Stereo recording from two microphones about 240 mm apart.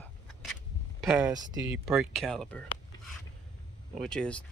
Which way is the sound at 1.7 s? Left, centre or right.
Centre.